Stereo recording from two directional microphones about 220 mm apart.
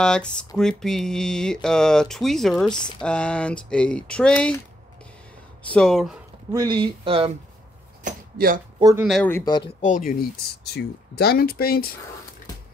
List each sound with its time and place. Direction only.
0.0 s speech: 5° left (ahead or behind)
5.6 s speech: 5° left (ahead or behind)
6.5 s speech: 20° right (ahead or behind)
8.0 s speech: 40° right (ahead or behind)
8.7 s speech: 15° right (ahead or behind)
9.0 s speech: 5° left (ahead or behind)
9.4 s speech: 20° left (ahead or behind)
9.8 s speech: 35° left (ahead or behind)